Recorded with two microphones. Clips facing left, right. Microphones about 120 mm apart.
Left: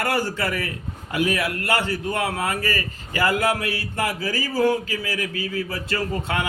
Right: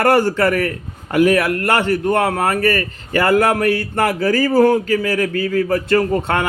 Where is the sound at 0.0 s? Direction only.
60° right (ahead or behind).